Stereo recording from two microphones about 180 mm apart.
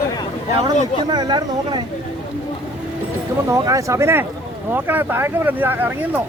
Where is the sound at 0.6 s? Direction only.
25° right (ahead or behind).